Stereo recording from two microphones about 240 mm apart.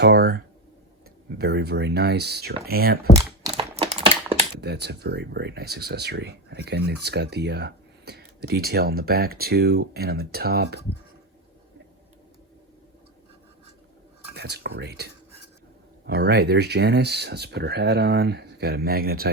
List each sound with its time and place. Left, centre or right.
0.0 s speech: right
3.4 s typing: right
4.6 s speech: right
14.3 s speech: right